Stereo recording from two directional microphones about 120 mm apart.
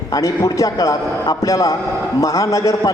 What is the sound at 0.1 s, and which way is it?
A man's voice, 25° left (ahead or behind).